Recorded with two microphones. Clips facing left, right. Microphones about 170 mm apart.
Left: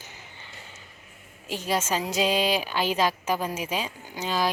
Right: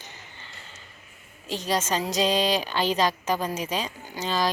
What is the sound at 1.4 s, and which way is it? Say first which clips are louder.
A woman's voice: right 1 dB; 10° left (ahead or behind).